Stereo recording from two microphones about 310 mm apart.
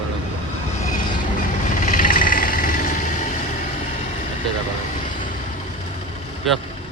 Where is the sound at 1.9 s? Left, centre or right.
Left.